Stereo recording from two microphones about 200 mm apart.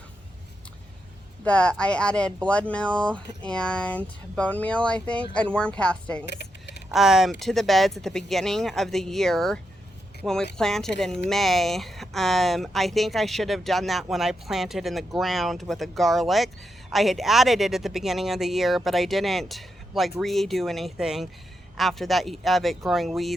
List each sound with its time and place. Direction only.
1.5 s speech: 5° left (ahead or behind)
6.2 s keys jangling: 55° left (ahead or behind)
6.9 s speech: centre (ahead or behind)